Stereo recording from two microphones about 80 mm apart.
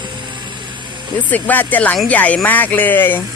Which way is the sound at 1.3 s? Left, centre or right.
Left.